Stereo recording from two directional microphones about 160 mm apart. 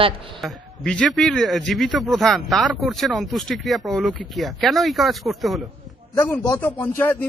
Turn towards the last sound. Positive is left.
turn(degrees=10)  # may be behind; listen again after turning